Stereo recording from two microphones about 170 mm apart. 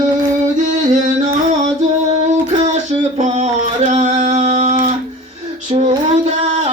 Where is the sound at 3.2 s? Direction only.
45° right (ahead or behind).